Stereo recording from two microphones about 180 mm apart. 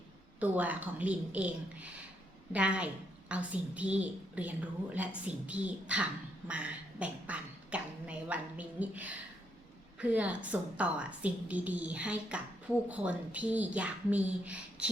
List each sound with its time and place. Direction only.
0.3 s a woman's voice: 10° right (ahead or behind)